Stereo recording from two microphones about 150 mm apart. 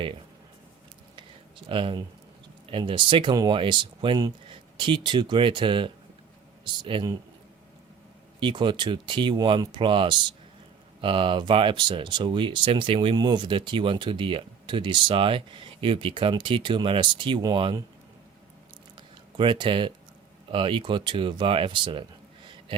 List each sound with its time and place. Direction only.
1.1 s a sound: 35° right (ahead or behind)
2.6 s speech: 35° right (ahead or behind)
8.4 s speech: 30° right (ahead or behind)
19.4 s speech: 35° right (ahead or behind)